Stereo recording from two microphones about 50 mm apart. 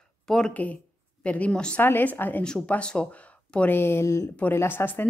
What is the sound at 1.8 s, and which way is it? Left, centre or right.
Speech, left.